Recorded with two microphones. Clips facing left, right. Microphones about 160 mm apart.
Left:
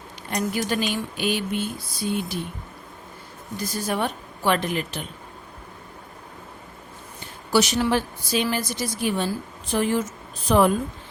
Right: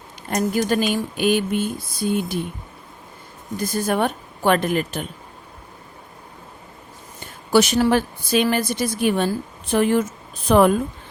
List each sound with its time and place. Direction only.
0.3 s speech: 45° right (ahead or behind)
3.6 s speech: 50° right (ahead or behind)
7.5 s a woman's voice: 55° right (ahead or behind)